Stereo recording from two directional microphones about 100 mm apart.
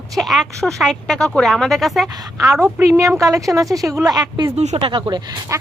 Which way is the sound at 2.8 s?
30° right (ahead or behind).